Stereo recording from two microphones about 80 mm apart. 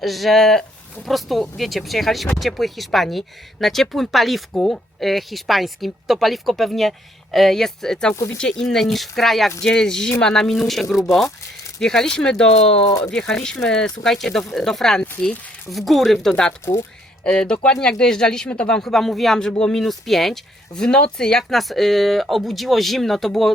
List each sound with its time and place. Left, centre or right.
0.0 s speech: centre
8.1 s speech: left
8.4 s speech: centre